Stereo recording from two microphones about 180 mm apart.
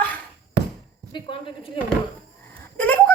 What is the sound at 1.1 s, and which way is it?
Speech, 25° left (ahead or behind).